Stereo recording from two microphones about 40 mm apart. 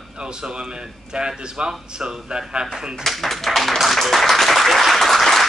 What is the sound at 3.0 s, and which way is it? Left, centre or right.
Speech, centre.